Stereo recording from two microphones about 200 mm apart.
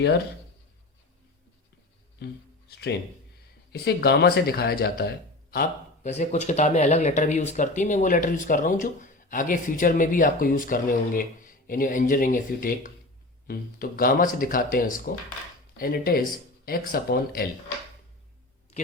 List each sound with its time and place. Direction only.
2.1 s music: 55° left (ahead or behind)
3.7 s speech: 55° left (ahead or behind)
6.1 s speech: 35° left (ahead or behind)